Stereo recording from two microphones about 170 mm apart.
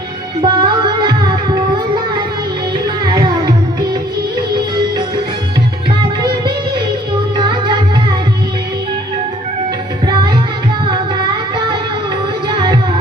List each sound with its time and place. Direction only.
0.4 s music: 25° right (ahead or behind)
3.0 s music: 25° right (ahead or behind)
6.2 s music: 25° right (ahead or behind)
10.1 s music: 25° right (ahead or behind)
10.8 s carnatic music: 25° right (ahead or behind)
12.5 s music: 25° right (ahead or behind)